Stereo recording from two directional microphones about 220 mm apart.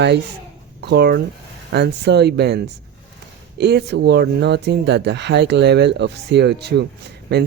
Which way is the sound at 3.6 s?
50° right (ahead or behind).